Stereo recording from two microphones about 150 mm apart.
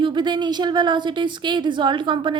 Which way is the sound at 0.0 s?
30° right (ahead or behind).